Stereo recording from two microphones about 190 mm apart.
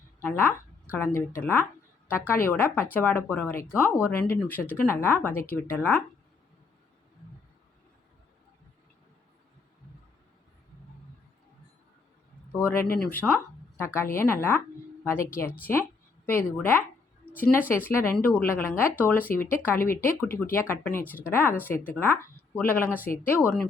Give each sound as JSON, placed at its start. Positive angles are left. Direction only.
{"t": 0.2, "sound": "a woman's voice", "side_deg": 10}
{"t": 5.3, "sound": "speech", "side_deg": 50}
{"t": 5.6, "sound": "speech", "side_deg": 10}
{"t": 12.5, "sound": "a sound", "side_deg": 15}
{"t": 12.8, "sound": "speech", "side_deg": 50}
{"t": 13.1, "sound": "speech", "side_deg": 10}
{"t": 15.3, "sound": "speech", "side_deg": 50}
{"t": 15.6, "sound": "speech", "side_deg": 10}
{"t": 18.0, "sound": "speech", "side_deg": 10}